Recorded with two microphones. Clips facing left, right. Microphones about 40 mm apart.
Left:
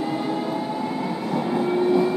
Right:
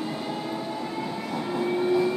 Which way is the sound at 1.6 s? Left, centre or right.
Centre.